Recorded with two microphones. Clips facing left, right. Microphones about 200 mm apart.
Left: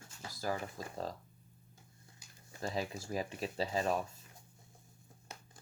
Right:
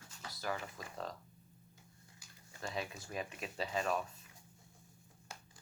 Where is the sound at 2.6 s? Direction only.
35° left (ahead or behind).